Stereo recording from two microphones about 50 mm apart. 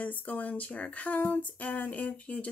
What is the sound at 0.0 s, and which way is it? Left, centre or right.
Speech, left.